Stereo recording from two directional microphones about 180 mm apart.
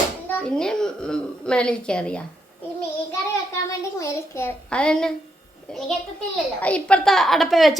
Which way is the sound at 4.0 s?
15° left (ahead or behind).